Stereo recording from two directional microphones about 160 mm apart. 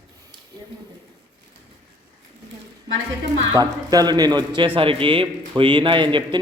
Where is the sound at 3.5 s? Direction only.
25° right (ahead or behind).